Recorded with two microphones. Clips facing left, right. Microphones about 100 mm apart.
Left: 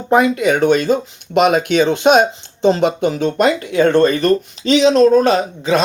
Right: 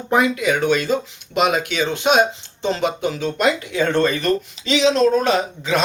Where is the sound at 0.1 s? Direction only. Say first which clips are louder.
Left 5 dB; 45° left (ahead or behind).